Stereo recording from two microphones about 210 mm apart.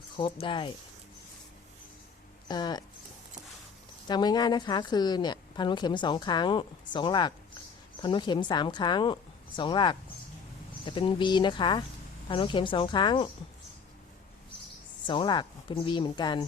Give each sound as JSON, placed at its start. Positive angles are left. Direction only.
{"t": 0.2, "sound": "a woman's voice", "side_deg": 25}
{"t": 2.5, "sound": "a woman's voice", "side_deg": 20}
{"t": 4.1, "sound": "a woman's voice", "side_deg": 20}
{"t": 15.0, "sound": "a woman's voice", "side_deg": 20}